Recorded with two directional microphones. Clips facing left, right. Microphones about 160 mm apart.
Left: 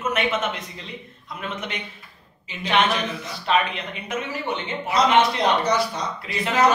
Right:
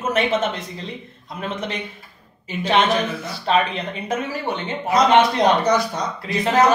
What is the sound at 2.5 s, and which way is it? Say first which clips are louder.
Speech: right 5 dB; 45° right (ahead or behind).